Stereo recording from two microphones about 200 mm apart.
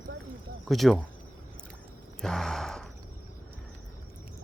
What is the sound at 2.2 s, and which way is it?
Gasp, centre (ahead or behind).